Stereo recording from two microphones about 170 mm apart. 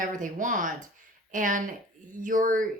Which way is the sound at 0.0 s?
50° right (ahead or behind).